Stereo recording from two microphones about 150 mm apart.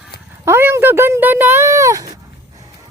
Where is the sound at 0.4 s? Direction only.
15° right (ahead or behind).